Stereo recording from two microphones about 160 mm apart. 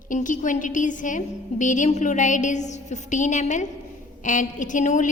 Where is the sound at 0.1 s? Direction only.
55° left (ahead or behind).